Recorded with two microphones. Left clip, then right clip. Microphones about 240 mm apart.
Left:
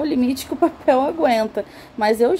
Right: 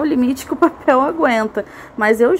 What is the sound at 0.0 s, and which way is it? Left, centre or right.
Speech, centre.